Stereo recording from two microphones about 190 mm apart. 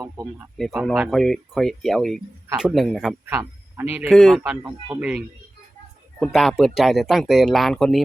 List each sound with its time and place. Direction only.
0.0 s speech: 10° right (ahead or behind)
3.2 s a man's voice: 10° right (ahead or behind)
4.1 s speech: centre (ahead or behind)